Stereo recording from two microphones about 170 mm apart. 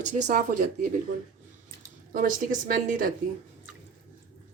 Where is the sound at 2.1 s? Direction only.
55° right (ahead or behind).